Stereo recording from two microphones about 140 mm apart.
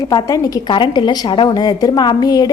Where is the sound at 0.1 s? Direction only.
25° left (ahead or behind).